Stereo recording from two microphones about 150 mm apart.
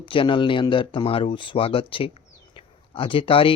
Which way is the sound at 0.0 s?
35° left (ahead or behind).